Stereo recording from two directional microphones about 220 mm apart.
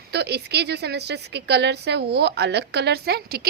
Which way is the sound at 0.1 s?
50° right (ahead or behind).